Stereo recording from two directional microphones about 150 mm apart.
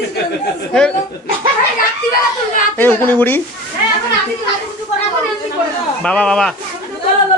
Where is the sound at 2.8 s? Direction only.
15° left (ahead or behind).